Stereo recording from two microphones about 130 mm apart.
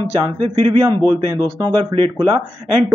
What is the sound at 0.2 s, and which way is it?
A man's voice, 35° right (ahead or behind).